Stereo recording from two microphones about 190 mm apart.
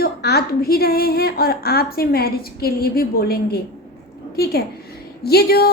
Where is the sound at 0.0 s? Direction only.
55° left (ahead or behind).